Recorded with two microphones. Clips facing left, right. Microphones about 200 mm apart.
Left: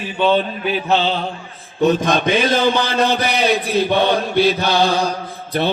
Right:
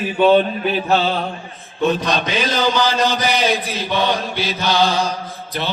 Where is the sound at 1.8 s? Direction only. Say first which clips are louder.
Left 3 dB; 45° left (ahead or behind).